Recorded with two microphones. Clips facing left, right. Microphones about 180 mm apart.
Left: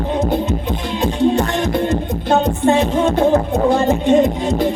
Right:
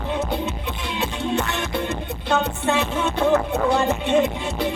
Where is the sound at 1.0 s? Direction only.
40° left (ahead or behind).